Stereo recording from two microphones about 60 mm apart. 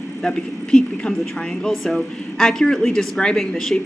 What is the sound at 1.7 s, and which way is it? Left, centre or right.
Speech, centre.